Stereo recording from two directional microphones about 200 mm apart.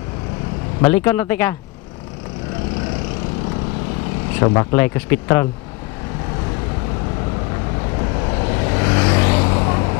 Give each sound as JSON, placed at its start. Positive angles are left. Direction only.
{"t": 0.7, "sound": "speech", "side_deg": 10}
{"t": 4.5, "sound": "speech", "side_deg": 25}
{"t": 4.7, "sound": "speech", "side_deg": 10}
{"t": 8.3, "sound": "vehicle", "side_deg": 25}